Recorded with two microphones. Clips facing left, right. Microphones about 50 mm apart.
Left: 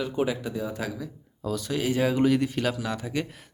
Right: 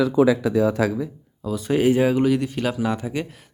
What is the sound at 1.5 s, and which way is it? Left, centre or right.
Speech, right.